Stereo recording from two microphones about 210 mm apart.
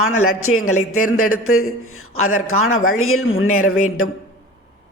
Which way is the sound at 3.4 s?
90° left.